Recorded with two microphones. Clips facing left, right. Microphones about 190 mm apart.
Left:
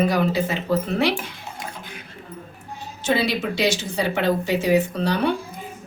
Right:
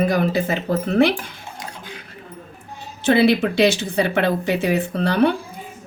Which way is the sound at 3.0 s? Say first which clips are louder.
Right 7 dB; 60° right (ahead or behind).